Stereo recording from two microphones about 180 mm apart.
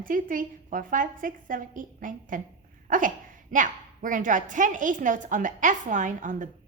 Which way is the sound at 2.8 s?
50° right (ahead or behind).